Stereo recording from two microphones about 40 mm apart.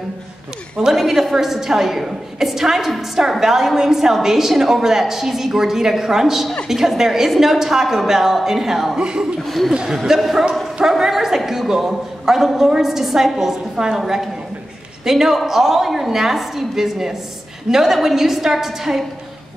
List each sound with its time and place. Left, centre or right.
0.7 s a woman's voice: centre
9.0 s speech: right
9.4 s speech: centre
10.1 s a woman's voice: centre